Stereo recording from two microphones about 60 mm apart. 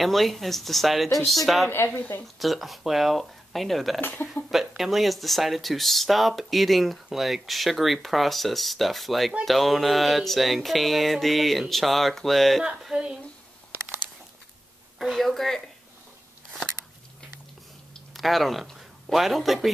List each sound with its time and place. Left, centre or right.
0.0 s speech: centre
2.0 s speech: left
2.3 s speech: centre
12.6 s a woman's voice: centre
15.0 s speech: centre
18.1 s speech: centre